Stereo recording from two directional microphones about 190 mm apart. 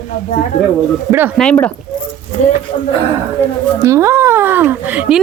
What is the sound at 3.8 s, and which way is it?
Speech, 15° right (ahead or behind).